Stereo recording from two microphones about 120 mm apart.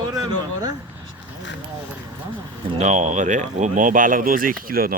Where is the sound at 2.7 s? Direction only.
70° right (ahead or behind); by 4.1 s 90° right.